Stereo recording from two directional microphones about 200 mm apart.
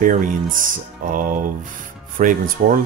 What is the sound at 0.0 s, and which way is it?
Speech, 40° right (ahead or behind).